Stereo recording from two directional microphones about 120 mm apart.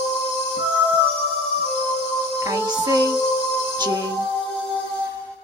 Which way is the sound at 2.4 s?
25° right (ahead or behind).